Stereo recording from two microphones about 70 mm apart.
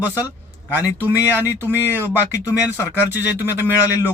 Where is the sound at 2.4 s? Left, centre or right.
Left.